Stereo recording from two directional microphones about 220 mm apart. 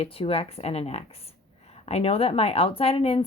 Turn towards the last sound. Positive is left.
turn(degrees=25)  # may be behind; listen again after turning